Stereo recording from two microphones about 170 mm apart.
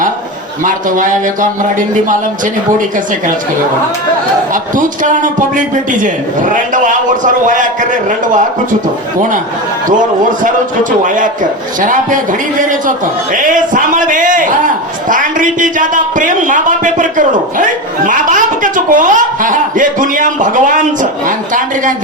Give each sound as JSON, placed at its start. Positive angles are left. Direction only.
{"t": 0.6, "sound": "a man's voice", "side_deg": -50}
{"t": 4.5, "sound": "a man's voice", "side_deg": -50}
{"t": 11.8, "sound": "a man's voice", "side_deg": -50}